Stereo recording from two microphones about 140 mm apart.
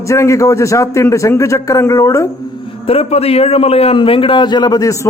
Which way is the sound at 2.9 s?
45° left (ahead or behind).